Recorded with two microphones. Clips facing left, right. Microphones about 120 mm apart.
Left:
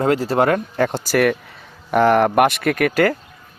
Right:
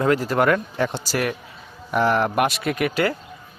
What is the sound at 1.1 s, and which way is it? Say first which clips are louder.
A man's voice: left 7 dB; 65° left (ahead or behind).